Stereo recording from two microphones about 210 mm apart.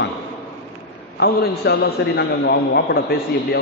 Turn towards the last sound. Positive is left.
turn(degrees=50)  # may be behind; listen again after turning